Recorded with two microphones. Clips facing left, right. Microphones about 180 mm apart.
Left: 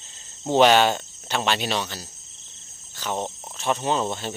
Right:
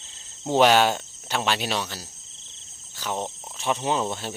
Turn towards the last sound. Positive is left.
turn(degrees=-5)  # may be behind; listen again after turning